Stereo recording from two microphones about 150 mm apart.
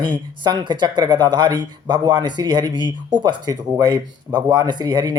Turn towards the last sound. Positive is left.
turn(degrees=-30)  # may be behind; listen again after turning